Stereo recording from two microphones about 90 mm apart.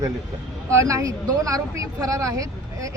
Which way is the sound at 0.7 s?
35° right (ahead or behind).